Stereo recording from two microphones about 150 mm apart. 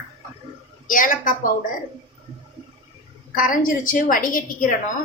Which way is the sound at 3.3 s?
65° left (ahead or behind).